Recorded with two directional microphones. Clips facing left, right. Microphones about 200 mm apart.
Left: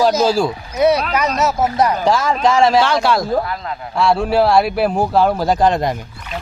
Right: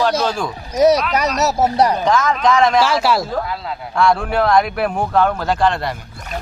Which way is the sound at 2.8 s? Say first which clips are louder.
Left 1 dB; 5° right (ahead or behind).